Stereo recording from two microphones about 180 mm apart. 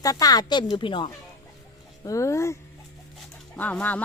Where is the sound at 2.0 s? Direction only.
15° left (ahead or behind).